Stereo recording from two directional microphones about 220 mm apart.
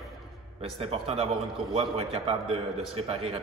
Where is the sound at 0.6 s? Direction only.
25° right (ahead or behind).